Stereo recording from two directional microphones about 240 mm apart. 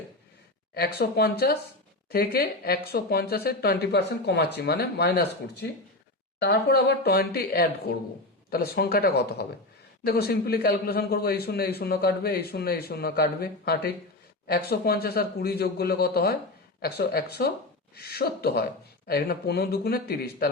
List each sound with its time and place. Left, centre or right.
0.7 s a man's voice: left